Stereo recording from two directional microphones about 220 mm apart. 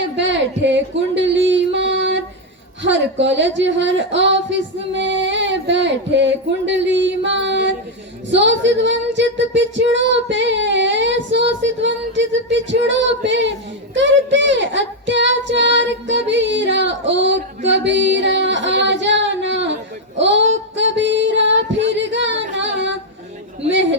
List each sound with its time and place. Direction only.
0.2 s a sound: 55° right (ahead or behind)
2.8 s child singing: 55° right (ahead or behind)
20.1 s female singing: 55° right (ahead or behind)
23.6 s child singing: 55° right (ahead or behind)